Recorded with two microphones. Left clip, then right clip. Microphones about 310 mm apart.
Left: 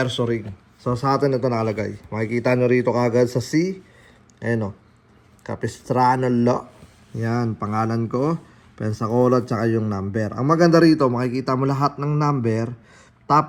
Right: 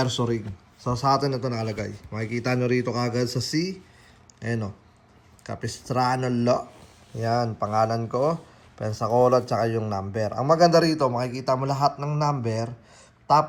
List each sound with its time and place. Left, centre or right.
0.0 s a man's voice: centre
2.6 s a man's voice: left
2.8 s a man's voice: centre